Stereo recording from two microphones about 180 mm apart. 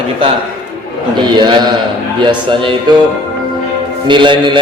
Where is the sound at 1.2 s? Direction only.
25° right (ahead or behind).